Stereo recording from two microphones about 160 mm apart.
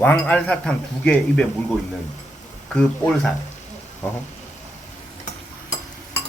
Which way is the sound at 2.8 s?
5° left (ahead or behind).